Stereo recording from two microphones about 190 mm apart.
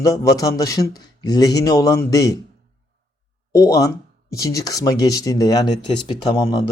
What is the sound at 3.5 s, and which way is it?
Speech, 20° left (ahead or behind).